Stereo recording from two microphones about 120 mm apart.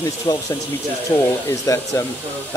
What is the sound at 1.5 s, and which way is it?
Speech, 25° left (ahead or behind).